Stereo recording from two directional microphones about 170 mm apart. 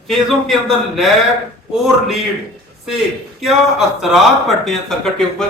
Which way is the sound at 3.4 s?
Centre (ahead or behind).